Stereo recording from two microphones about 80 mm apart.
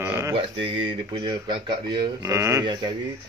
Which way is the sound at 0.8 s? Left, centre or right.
Right.